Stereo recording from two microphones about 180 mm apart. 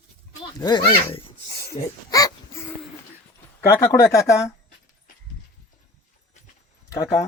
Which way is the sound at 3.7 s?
15° left (ahead or behind).